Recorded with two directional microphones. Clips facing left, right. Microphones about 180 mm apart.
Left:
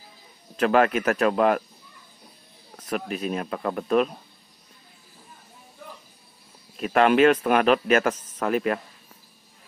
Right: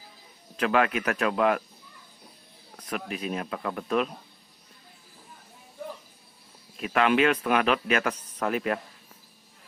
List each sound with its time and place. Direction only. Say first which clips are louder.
0.6 s speech: left 4 dB; 45° left (ahead or behind)
2.8 s speech: left 4 dB; 45° left (ahead or behind)
6.8 s speech: left 5 dB; 45° left (ahead or behind)